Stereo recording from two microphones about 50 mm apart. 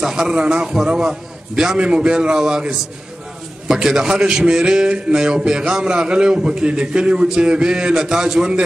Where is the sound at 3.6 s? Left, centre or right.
Centre.